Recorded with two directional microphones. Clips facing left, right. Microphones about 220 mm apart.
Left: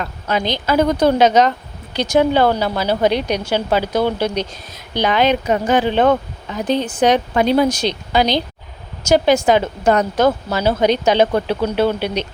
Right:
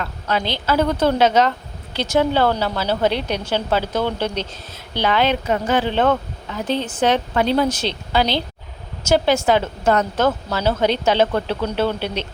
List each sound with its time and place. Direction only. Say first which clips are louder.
0.0 s speech: left 2 dB; 15° left (ahead or behind)